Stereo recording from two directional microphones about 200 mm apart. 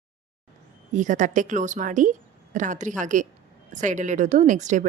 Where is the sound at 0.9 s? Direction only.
40° right (ahead or behind).